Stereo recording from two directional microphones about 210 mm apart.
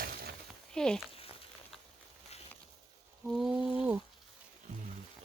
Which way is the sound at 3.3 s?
5° right (ahead or behind).